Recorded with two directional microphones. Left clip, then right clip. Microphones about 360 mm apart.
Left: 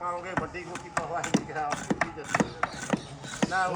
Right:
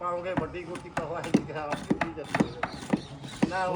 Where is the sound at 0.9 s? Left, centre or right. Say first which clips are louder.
Even; centre.